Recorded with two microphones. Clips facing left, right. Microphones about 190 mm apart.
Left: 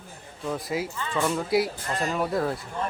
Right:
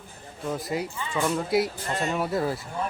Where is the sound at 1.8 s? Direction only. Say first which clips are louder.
Even; 25° right (ahead or behind).